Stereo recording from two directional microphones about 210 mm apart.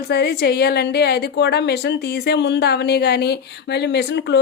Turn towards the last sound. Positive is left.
turn(degrees=55)  # may be behind; listen again after turning